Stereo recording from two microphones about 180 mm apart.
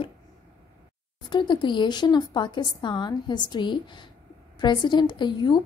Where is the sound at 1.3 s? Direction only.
25° left (ahead or behind).